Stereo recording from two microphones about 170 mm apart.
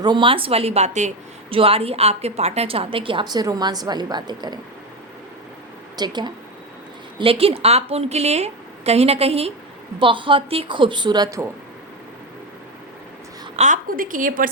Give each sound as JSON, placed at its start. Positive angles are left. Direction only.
{"t": 0.0, "sound": "a woman's voice", "side_deg": -25}
{"t": 6.0, "sound": "a woman's voice", "side_deg": -25}
{"t": 13.6, "sound": "a woman's voice", "side_deg": -50}